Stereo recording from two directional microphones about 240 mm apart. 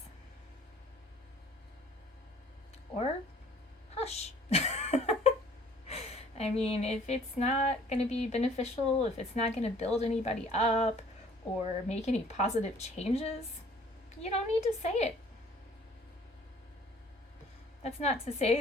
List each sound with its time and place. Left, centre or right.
3.9 s a sound: left
5.9 s speech: left
17.8 s speech: left